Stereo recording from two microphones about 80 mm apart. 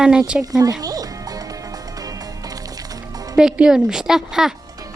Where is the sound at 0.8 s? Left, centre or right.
Right.